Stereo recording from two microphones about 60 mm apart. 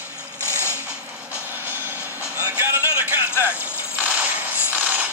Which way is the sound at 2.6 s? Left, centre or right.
Right.